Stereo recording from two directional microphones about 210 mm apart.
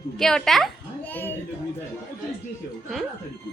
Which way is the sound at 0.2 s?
Centre (ahead or behind).